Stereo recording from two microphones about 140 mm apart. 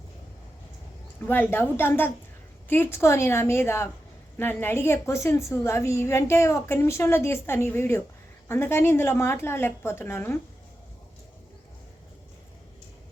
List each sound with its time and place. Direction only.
1.3 s a woman's voice: 15° left (ahead or behind)